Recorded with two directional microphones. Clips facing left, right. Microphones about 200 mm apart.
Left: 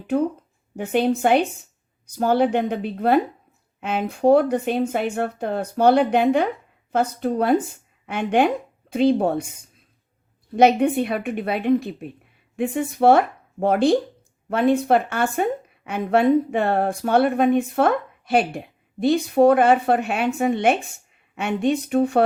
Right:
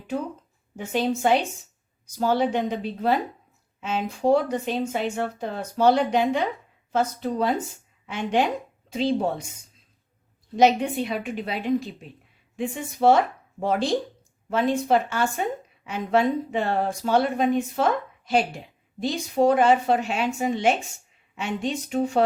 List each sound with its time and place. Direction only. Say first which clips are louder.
0.8 s a woman's voice: left 4 dB; 60° left (ahead or behind)
10.6 s speech: left 4 dB; 55° left (ahead or behind)